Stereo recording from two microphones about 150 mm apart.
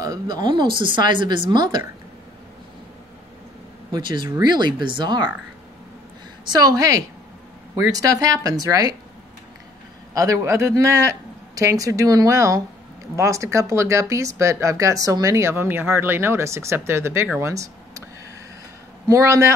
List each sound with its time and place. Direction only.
0.0 s speech: 25° right (ahead or behind)
3.9 s speech: 30° right (ahead or behind)
6.5 s speech: 25° right (ahead or behind)
10.1 s speech: 20° right (ahead or behind)
19.0 s speech: 20° right (ahead or behind)